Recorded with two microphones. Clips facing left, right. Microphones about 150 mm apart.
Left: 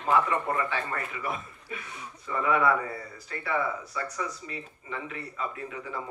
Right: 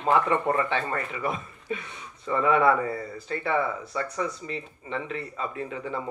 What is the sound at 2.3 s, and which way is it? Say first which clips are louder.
Speech: right 4 dB; 40° right (ahead or behind).